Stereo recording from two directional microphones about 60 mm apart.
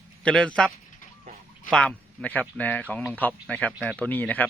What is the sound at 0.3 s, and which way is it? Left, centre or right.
Speech, centre.